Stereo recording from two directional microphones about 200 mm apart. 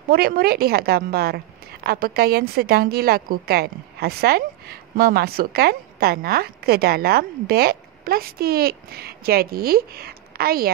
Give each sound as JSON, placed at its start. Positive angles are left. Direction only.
{"t": 0.1, "sound": "a woman's voice", "side_deg": -50}